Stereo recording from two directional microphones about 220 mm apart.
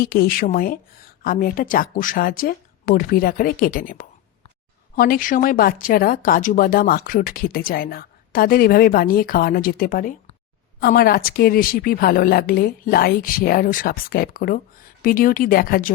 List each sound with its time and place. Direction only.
0.0 s speech: 45° left (ahead or behind)